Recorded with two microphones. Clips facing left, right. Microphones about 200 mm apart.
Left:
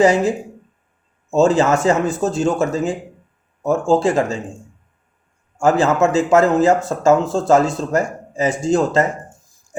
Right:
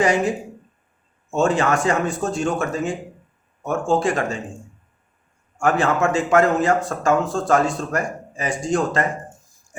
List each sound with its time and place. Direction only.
0.0 s speech: 25° left (ahead or behind)
5.5 s speech: 25° left (ahead or behind)